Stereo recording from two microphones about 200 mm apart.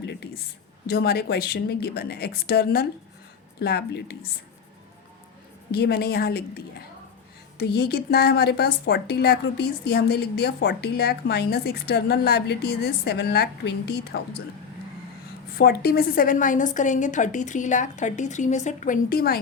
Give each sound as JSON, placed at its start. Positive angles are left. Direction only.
{"t": 0.0, "sound": "a sound", "side_deg": 55}
{"t": 0.9, "sound": "a woman's voice", "side_deg": 50}
{"t": 5.7, "sound": "a woman's voice", "side_deg": 55}
{"t": 15.5, "sound": "a woman's voice", "side_deg": 50}